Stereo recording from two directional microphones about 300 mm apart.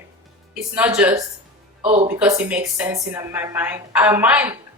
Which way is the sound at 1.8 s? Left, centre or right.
Right.